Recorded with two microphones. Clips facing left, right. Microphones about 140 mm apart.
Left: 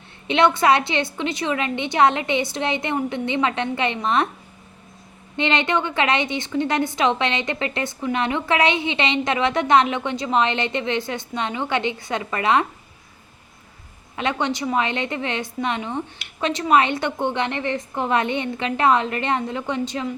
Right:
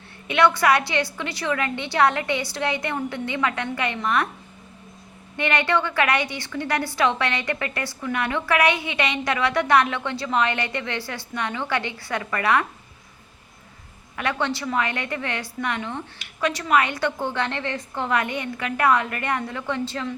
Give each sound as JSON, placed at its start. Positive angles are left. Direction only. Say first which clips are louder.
{"t": 0.3, "sound": "a woman's voice", "louder": "left 2 dB", "side_deg": 25}
{"t": 5.4, "sound": "a woman's voice", "louder": "left 1 dB", "side_deg": 20}
{"t": 14.2, "sound": "a woman's voice", "louder": "left 2 dB", "side_deg": 20}